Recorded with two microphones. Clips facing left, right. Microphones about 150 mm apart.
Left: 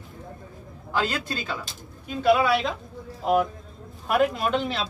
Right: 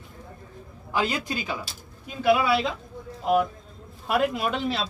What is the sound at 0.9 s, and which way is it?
Speech, 10° right (ahead or behind).